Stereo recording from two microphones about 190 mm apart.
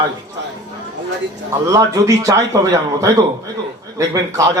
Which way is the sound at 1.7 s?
15° right (ahead or behind).